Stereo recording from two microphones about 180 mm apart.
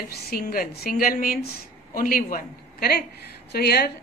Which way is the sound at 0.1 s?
55° left (ahead or behind).